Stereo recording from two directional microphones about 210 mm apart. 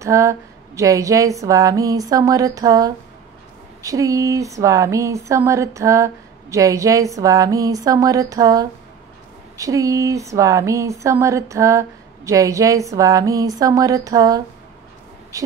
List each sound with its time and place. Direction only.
0.0 s speech: 15° right (ahead or behind)